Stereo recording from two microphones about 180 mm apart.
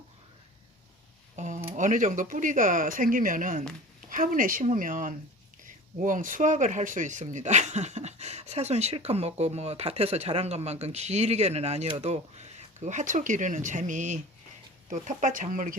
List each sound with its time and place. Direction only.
1.4 s speech: 45° right (ahead or behind)